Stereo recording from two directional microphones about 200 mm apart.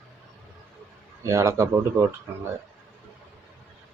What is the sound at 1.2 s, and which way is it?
Speech, 15° right (ahead or behind).